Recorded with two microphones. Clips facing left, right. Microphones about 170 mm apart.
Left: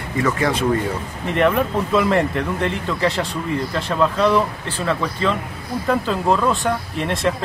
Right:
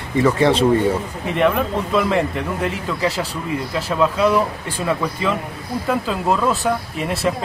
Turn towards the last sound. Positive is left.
turn(degrees=-5)  # may be behind; listen again after turning